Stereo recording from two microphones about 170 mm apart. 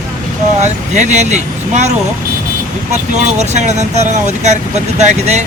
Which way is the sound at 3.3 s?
40° right (ahead or behind).